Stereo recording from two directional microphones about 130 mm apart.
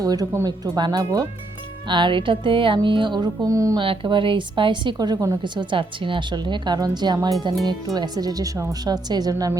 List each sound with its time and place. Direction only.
0.0 s a woman's voice: 30° right (ahead or behind)
3.8 s a woman's voice: 40° right (ahead or behind)